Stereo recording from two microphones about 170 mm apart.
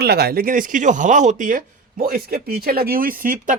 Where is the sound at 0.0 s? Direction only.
70° right (ahead or behind).